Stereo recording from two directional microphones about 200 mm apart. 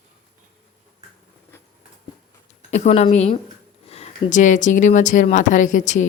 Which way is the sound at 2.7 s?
35° left (ahead or behind).